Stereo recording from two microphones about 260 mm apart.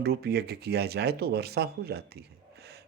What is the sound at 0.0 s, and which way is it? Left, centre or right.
Speech, right.